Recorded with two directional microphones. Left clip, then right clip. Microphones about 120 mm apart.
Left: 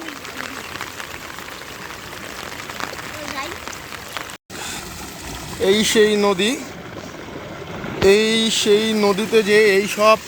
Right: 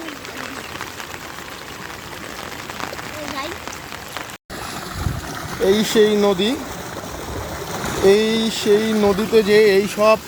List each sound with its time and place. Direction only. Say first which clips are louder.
5.6 s speech: even; 5° right (ahead or behind)
7.7 s boat: right 5 dB; 60° left (ahead or behind)
8.0 s speech: left 1 dB; centre (ahead or behind)